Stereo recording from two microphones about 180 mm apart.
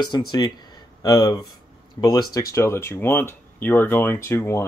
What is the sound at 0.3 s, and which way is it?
Speech, 25° left (ahead or behind).